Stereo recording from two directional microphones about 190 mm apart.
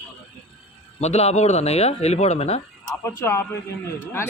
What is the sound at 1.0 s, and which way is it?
Speech, 35° left (ahead or behind).